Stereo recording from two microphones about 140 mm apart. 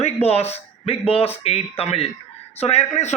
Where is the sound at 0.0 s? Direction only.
45° left (ahead or behind).